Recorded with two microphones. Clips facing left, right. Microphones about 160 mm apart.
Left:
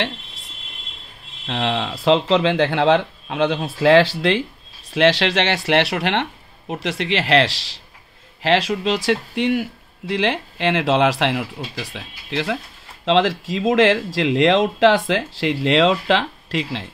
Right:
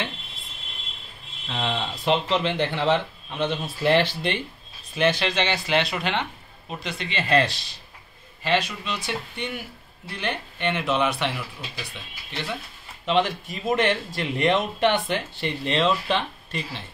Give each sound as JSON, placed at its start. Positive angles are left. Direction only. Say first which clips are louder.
{"t": 1.5, "sound": "speech", "louder": "left 6 dB", "side_deg": 90}